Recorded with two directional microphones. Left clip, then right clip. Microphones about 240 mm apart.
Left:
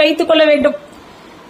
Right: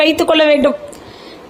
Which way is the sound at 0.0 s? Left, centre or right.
Right.